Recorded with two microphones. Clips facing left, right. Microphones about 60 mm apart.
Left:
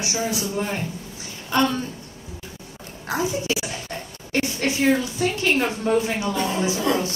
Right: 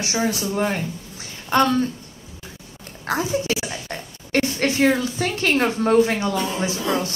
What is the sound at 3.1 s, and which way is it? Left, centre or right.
Speech, right.